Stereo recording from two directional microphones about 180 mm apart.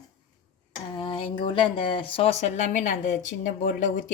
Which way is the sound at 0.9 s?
25° left (ahead or behind).